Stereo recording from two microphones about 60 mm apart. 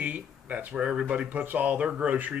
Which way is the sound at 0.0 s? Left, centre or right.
Right.